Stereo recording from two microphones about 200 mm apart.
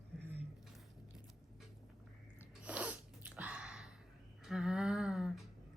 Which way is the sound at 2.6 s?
5° right (ahead or behind).